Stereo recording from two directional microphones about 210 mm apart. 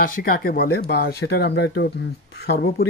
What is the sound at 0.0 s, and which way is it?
Speech, 45° left (ahead or behind).